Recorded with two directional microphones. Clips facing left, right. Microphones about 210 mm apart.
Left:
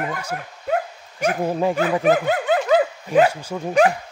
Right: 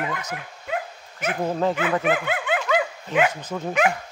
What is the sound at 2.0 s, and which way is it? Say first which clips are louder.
Dog: left 6 dB; 40° left (ahead or behind).